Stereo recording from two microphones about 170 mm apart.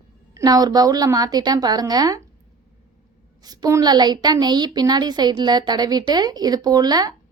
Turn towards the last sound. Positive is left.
turn(degrees=-25)  # may be behind; listen again after turning